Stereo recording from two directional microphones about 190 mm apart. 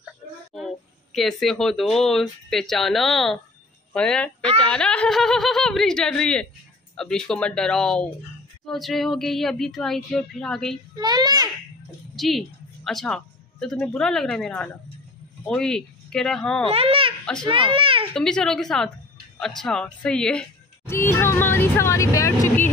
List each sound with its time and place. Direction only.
0.6 s speech: centre (ahead or behind)
11.0 s a child's voice: 20° right (ahead or behind)
12.2 s a woman's voice: centre (ahead or behind)
16.7 s a child's voice: 30° right (ahead or behind)
18.1 s a woman's voice: 5° left (ahead or behind)